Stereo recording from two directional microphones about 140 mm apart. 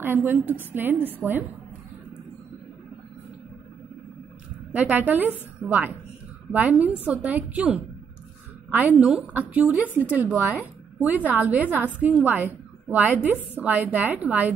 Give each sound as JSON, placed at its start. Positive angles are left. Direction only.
{"t": 0.0, "sound": "a woman's voice", "side_deg": -15}
{"t": 4.7, "sound": "a woman's voice", "side_deg": -10}